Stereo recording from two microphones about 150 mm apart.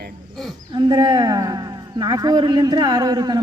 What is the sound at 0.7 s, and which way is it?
A man's voice, 25° right (ahead or behind).